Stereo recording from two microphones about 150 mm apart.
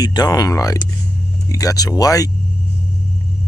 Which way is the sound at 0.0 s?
25° left (ahead or behind).